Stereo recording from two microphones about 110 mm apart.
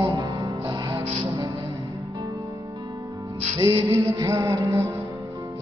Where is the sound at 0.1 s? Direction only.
35° right (ahead or behind).